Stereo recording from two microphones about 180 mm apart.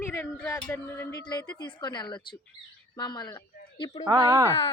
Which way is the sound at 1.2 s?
25° left (ahead or behind).